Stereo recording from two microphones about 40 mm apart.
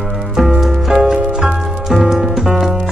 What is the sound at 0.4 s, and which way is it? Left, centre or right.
Music, centre.